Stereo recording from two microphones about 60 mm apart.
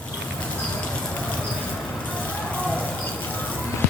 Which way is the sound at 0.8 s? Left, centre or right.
Centre.